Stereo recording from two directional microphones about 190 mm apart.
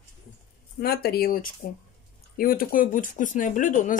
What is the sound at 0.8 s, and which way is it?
Speech, 55° left (ahead or behind).